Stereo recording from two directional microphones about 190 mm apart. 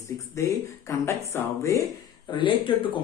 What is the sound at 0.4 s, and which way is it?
Speech, 15° left (ahead or behind).